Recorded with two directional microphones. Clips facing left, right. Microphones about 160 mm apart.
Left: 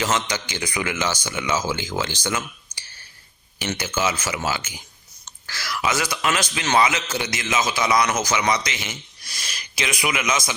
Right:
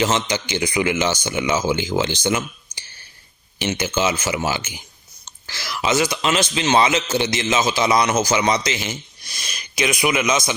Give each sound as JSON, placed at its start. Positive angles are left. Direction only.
{"t": 0.0, "sound": "a man's voice", "side_deg": -25}